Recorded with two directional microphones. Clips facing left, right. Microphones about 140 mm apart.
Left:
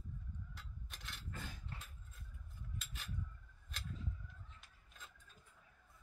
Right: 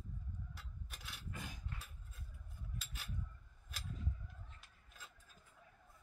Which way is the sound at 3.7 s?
5° right (ahead or behind).